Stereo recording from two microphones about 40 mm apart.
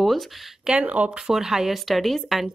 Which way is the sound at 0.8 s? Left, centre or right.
Right.